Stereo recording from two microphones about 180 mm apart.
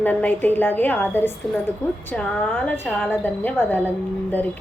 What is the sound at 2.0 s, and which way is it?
A woman's voice, 5° left (ahead or behind).